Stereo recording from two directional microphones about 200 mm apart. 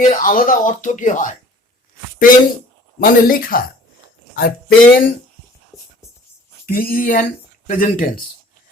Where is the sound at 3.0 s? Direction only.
45° left (ahead or behind).